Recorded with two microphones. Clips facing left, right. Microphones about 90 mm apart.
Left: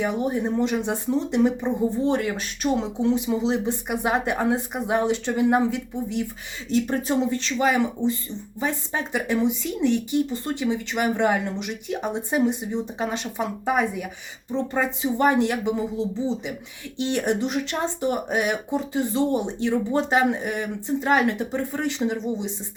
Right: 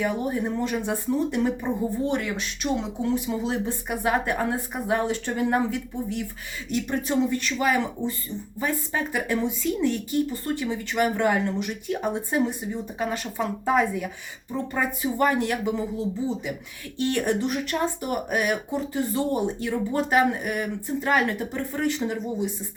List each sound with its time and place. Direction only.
0.0 s speech: 20° left (ahead or behind)
3.1 s speech: 20° left (ahead or behind)
6.7 s speech: 30° left (ahead or behind)